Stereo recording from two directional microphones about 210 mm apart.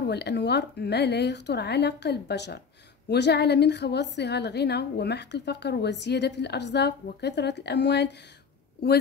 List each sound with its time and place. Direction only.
0.0 s a woman's voice: 50° left (ahead or behind)